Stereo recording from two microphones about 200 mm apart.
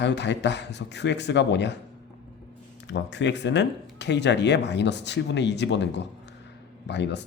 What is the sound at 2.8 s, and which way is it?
Speech, 60° left (ahead or behind).